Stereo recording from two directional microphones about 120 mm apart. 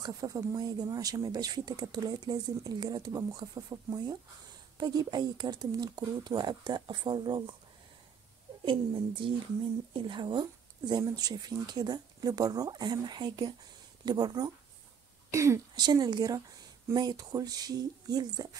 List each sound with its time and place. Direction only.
0.0 s speech: 30° right (ahead or behind)
8.6 s speech: 45° right (ahead or behind); by 15.6 s 25° right (ahead or behind)
15.7 s speech: 35° right (ahead or behind)